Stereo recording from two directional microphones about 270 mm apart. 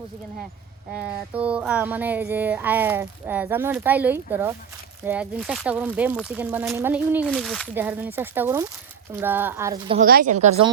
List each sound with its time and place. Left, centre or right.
0.9 s music: centre
5.0 s speech: centre
9.1 s music: centre
10.0 s speech: right